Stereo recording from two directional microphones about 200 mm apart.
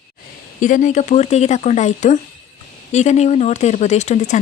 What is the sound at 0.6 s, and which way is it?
A woman's voice, 40° left (ahead or behind).